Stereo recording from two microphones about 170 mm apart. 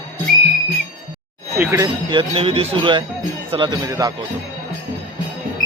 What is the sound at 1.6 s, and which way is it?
Speech, 20° right (ahead or behind).